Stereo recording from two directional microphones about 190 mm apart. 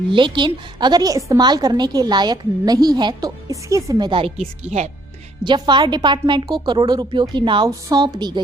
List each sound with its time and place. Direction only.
0.1 s a woman's voice: 25° right (ahead or behind)
5.4 s a woman's voice: 25° right (ahead or behind)